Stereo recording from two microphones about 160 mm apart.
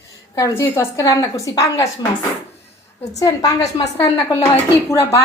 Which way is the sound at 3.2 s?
20° left (ahead or behind).